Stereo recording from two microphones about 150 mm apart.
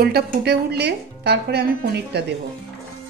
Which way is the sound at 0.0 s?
90° right.